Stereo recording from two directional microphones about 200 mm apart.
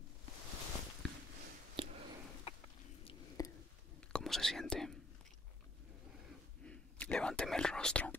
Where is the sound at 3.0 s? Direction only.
20° left (ahead or behind).